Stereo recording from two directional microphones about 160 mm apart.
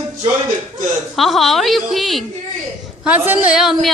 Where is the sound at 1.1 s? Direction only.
Centre (ahead or behind).